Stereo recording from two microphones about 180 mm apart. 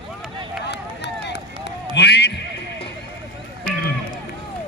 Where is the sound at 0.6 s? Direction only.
70° left (ahead or behind).